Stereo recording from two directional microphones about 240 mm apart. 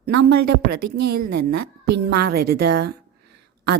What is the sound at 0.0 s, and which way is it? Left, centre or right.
A woman's voice, right.